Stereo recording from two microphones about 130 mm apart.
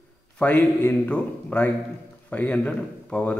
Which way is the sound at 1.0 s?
15° left (ahead or behind).